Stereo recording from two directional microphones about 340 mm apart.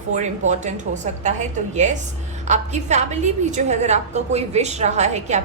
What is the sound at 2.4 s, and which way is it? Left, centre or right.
A woman's voice, centre.